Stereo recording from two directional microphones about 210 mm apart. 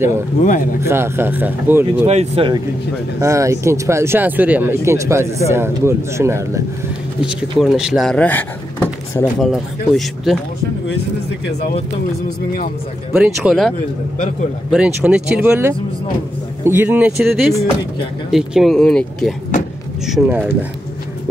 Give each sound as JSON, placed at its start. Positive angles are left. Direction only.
{"t": 0.4, "sound": "a man's voice", "side_deg": 40}
{"t": 0.7, "sound": "speech", "side_deg": -10}
{"t": 2.0, "sound": "speech", "side_deg": -30}
{"t": 3.2, "sound": "speech", "side_deg": -15}
{"t": 13.1, "sound": "speech", "side_deg": -5}